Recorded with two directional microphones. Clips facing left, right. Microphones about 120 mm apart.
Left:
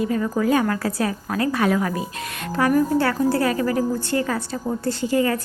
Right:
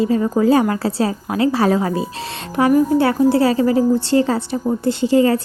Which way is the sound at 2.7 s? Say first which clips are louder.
Right 5 dB; 20° right (ahead or behind).